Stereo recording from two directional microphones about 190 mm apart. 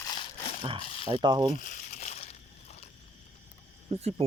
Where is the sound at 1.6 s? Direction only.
40° left (ahead or behind).